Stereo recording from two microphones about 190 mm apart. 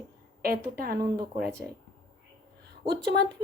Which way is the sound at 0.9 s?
20° right (ahead or behind).